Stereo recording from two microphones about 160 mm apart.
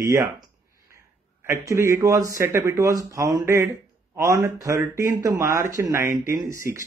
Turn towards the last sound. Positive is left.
turn(degrees=-20)  # may be behind; listen again after turning